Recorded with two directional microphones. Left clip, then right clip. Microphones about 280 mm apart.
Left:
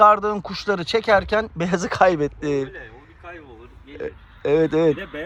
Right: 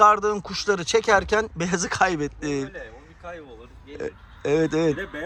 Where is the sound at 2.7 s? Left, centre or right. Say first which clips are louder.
Even; right.